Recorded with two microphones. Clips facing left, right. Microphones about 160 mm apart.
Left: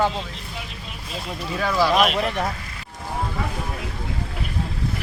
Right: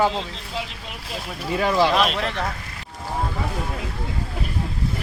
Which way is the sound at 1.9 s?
5° left (ahead or behind).